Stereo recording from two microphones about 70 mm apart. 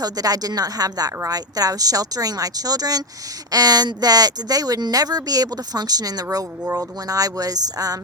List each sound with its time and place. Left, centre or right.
0.0 s speech: right